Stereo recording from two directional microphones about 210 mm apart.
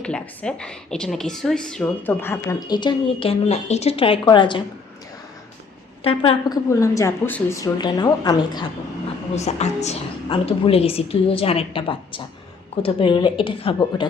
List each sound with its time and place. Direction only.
0.0 s a woman's voice: 5° left (ahead or behind); by 4.6 s 20° left (ahead or behind)
6.0 s a woman's voice: 25° left (ahead or behind)
6.7 s a woman's voice: 15° left (ahead or behind)
9.3 s a woman's voice: 30° left (ahead or behind)